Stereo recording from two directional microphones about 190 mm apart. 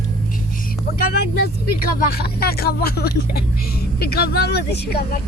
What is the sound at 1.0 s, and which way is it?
Vehicle, 50° left (ahead or behind).